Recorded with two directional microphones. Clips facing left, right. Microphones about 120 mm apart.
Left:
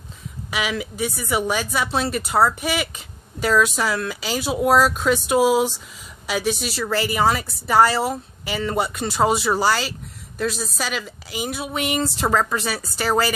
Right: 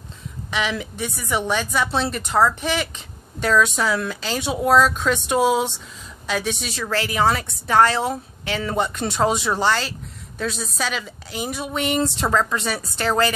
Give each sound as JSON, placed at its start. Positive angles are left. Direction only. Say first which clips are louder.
{"t": 0.5, "sound": "a woman's voice", "louder": "even", "side_deg": 5}